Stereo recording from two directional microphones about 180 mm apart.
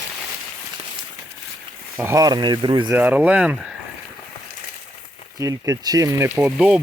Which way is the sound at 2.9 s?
10° right (ahead or behind).